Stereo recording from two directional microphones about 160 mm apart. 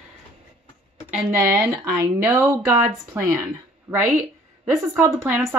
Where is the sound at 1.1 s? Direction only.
15° right (ahead or behind).